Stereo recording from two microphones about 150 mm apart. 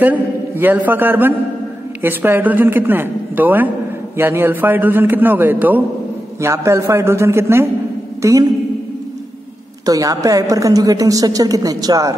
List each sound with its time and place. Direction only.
0.0 s a man's voice: 10° right (ahead or behind)
9.8 s a woman's voice: 25° right (ahead or behind)